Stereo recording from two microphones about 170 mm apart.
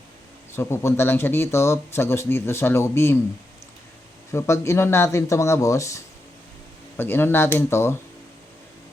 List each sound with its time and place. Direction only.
0.5 s speech: 15° left (ahead or behind)
4.3 s speech: 15° left (ahead or behind)